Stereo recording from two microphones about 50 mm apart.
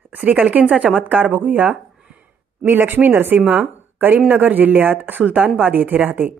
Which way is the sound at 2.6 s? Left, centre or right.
Right.